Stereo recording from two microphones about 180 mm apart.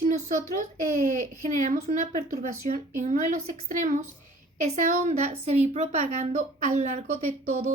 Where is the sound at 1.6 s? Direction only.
45° right (ahead or behind).